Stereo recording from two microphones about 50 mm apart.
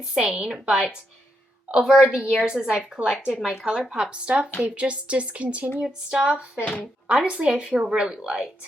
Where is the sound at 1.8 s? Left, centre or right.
Centre; by 5.7 s right.